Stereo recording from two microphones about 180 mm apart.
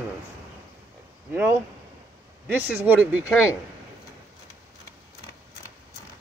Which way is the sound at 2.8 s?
10° right (ahead or behind).